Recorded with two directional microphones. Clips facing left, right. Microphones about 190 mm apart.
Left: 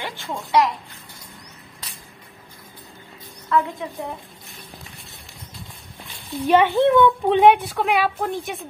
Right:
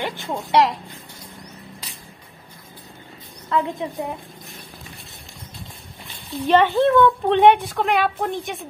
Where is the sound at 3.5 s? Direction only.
25° right (ahead or behind).